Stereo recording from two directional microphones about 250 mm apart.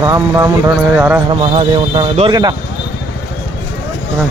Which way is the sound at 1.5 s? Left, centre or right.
Right.